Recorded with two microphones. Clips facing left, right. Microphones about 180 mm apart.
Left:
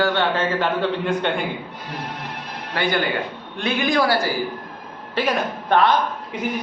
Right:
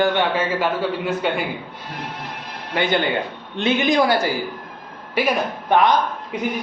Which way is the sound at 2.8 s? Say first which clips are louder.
Right 2 dB; 20° right (ahead or behind).